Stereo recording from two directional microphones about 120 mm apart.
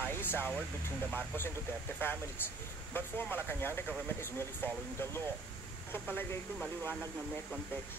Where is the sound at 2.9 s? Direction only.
15° left (ahead or behind).